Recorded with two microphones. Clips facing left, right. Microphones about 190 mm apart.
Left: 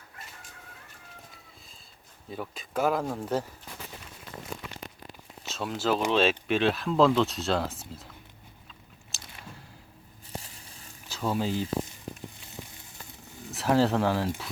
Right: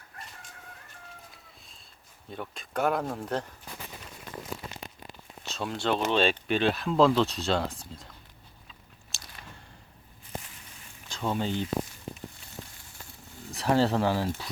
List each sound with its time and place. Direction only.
2.3 s speech: centre (ahead or behind)
5.4 s a sound: centre (ahead or behind)
6.1 s speech: centre (ahead or behind)
9.1 s chewing: centre (ahead or behind)
10.4 s a sound: 35° left (ahead or behind)
11.1 s speech: 5° left (ahead or behind)
13.5 s speech: centre (ahead or behind)